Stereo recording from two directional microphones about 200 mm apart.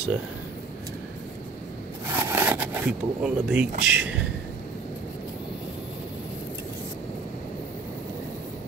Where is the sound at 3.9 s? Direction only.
5° right (ahead or behind).